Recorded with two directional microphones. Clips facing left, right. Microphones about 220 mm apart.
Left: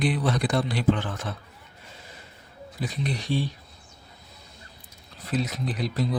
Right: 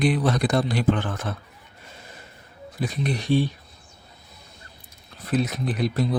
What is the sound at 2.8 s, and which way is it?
Speech, 55° right (ahead or behind).